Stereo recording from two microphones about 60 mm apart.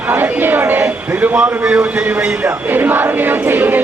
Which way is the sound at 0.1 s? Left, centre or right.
Right.